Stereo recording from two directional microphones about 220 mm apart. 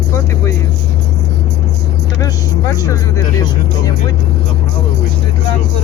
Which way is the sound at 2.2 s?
15° left (ahead or behind).